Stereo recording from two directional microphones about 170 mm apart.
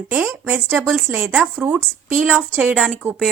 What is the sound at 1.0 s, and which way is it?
A woman's voice, 15° right (ahead or behind).